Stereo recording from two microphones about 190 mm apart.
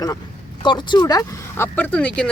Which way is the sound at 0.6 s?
25° left (ahead or behind).